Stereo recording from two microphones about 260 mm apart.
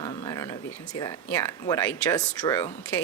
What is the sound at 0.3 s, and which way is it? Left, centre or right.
A woman's voice, centre.